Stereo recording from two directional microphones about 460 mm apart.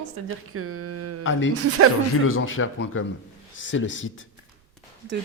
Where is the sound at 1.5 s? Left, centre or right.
Right.